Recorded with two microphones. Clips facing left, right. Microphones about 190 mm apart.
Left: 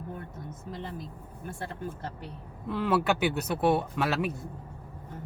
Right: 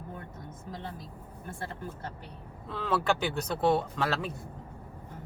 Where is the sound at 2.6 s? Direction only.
15° left (ahead or behind).